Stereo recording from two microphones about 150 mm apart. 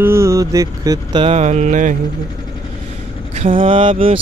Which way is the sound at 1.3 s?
50° right (ahead or behind).